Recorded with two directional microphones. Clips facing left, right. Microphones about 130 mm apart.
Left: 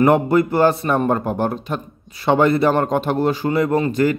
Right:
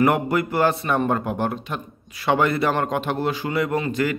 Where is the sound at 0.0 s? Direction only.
25° left (ahead or behind).